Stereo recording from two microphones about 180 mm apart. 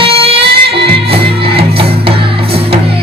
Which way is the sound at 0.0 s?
30° right (ahead or behind).